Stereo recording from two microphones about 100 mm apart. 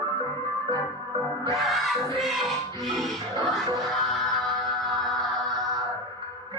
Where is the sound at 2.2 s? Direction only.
Centre (ahead or behind).